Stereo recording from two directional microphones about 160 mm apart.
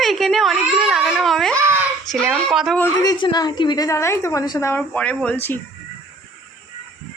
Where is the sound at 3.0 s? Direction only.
25° left (ahead or behind).